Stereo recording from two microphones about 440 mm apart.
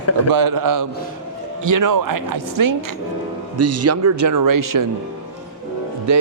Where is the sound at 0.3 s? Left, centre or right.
Right.